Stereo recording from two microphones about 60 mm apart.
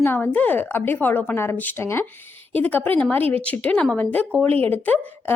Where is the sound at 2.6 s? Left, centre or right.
Left.